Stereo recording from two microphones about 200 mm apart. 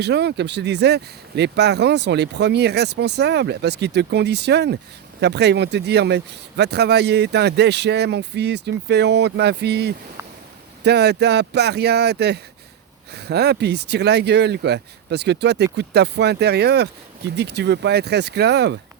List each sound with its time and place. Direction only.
0.0 s speech: 55° right (ahead or behind)